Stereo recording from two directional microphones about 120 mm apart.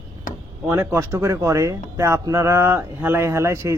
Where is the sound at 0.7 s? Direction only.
20° right (ahead or behind).